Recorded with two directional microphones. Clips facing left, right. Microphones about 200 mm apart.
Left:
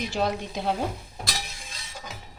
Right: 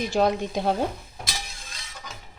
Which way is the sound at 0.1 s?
50° right (ahead or behind).